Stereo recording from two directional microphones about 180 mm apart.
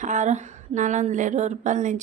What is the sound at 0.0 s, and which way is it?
A woman's voice, 45° right (ahead or behind).